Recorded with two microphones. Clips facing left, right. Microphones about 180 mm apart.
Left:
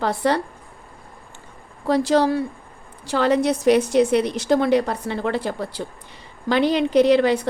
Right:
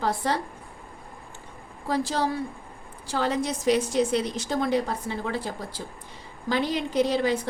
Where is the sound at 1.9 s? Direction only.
70° left (ahead or behind).